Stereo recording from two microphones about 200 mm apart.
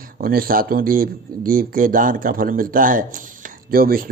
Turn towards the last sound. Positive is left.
turn(degrees=-45)  # may be behind; listen again after turning